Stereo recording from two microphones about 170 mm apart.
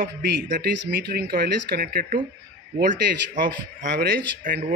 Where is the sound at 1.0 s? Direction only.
65° right (ahead or behind).